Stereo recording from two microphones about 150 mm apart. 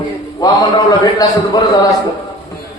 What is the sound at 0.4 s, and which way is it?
Speech, 25° left (ahead or behind).